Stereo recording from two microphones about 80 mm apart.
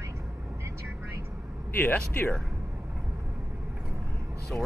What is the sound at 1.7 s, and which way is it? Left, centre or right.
Speech, left.